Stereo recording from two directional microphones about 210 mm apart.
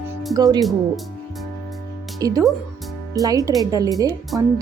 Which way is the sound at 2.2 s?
15° right (ahead or behind).